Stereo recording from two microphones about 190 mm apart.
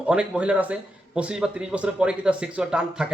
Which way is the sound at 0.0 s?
5° right (ahead or behind).